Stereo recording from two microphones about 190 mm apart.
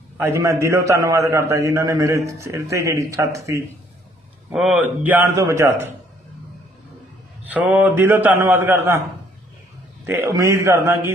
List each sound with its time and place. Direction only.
0.2 s a man's voice: 15° right (ahead or behind)
4.5 s a man's voice: 5° right (ahead or behind)
7.4 s a man's voice: 5° right (ahead or behind)
10.1 s a man's voice: 15° right (ahead or behind)